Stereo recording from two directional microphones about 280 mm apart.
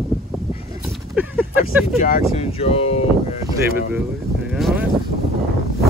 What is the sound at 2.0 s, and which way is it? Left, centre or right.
Speech, left.